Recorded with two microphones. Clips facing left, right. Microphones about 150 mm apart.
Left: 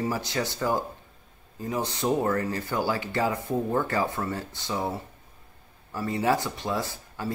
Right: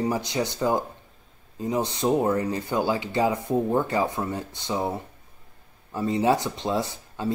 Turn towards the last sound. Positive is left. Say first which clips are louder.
# right 3 dB
turn(degrees=-20)  # may be behind; listen again after turning